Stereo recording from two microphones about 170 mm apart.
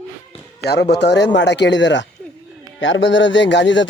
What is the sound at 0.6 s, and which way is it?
Speech, 80° left.